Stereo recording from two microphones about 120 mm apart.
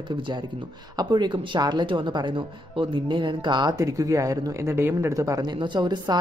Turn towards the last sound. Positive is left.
turn(degrees=-35)  # may be behind; listen again after turning